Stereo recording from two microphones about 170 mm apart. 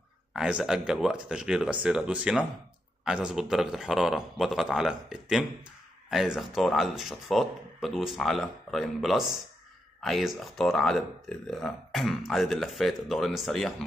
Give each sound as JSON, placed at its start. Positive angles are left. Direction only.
{"t": 0.3, "sound": "speech", "side_deg": -5}